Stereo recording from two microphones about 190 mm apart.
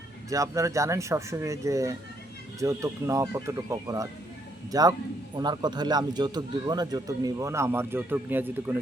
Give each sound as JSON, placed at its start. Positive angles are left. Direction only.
{"t": 0.3, "sound": "a man's voice", "side_deg": -15}